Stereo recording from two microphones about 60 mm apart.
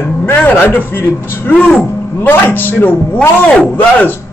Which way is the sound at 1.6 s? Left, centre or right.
Centre.